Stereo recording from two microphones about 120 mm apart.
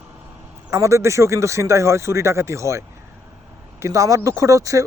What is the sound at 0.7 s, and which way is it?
Speech, 25° right (ahead or behind).